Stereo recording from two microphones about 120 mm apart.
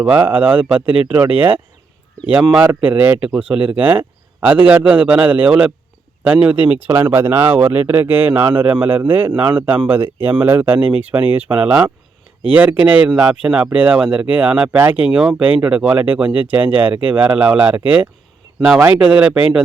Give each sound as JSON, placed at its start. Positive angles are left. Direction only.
{"t": 0.0, "sound": "speech", "side_deg": -15}